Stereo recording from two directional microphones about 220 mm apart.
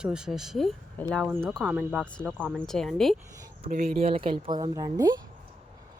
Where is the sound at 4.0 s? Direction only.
25° right (ahead or behind).